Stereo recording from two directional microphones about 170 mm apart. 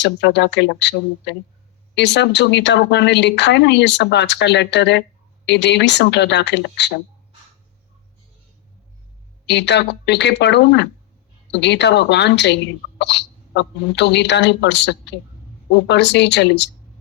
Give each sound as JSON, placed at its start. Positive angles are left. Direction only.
{"t": 0.0, "sound": "a woman's voice", "side_deg": 90}
{"t": 9.5, "sound": "a woman's voice", "side_deg": 90}